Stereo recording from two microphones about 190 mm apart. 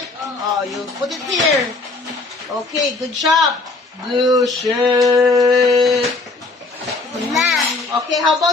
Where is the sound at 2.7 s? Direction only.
Centre (ahead or behind).